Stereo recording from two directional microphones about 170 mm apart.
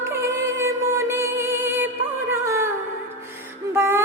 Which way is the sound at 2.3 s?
15° right (ahead or behind).